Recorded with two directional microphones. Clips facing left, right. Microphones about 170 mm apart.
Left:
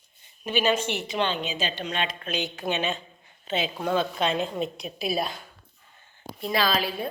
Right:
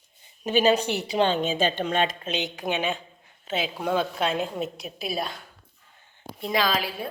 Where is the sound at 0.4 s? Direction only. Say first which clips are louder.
Right 4 dB; 40° right (ahead or behind).